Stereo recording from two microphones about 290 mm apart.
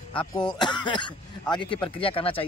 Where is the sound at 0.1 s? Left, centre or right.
Centre.